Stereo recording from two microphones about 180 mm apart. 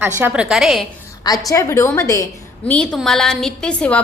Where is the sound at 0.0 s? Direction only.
10° right (ahead or behind).